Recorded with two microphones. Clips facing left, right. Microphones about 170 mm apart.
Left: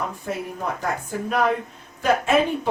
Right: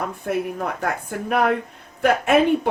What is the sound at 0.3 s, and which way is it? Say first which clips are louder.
Speech: right 6 dB; 55° right (ahead or behind).